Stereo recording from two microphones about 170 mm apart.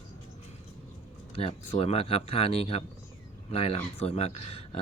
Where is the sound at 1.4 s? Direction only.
35° left (ahead or behind).